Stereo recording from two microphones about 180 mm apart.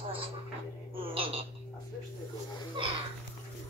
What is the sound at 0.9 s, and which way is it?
Frog, 30° right (ahead or behind).